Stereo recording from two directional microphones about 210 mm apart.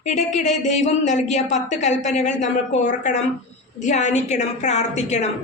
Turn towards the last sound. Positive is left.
turn(degrees=35)  # may be behind; listen again after turning